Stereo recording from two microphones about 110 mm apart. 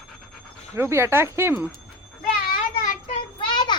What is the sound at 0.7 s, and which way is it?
Speech, 25° right (ahead or behind).